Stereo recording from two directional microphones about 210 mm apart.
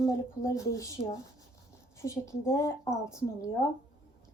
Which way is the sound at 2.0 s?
15° left (ahead or behind).